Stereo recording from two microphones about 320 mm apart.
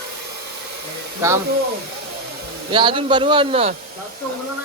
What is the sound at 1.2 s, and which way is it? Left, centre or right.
Speech, centre.